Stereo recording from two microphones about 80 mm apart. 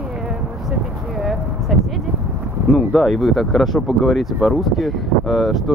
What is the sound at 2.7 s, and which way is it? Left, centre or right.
Speech, centre.